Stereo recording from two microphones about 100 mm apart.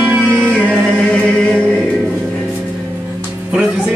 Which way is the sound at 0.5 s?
10° left (ahead or behind).